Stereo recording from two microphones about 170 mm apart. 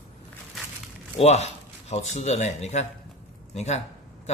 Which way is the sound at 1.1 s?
40° left (ahead or behind).